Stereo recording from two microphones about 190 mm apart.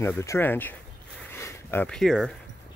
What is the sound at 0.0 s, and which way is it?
Speech, 15° left (ahead or behind).